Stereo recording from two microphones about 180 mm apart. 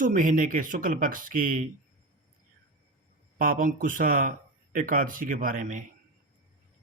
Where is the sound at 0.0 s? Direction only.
50° right (ahead or behind).